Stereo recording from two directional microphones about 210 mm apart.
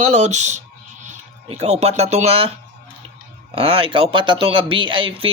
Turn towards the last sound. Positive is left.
turn(degrees=-25)  # may be behind; listen again after turning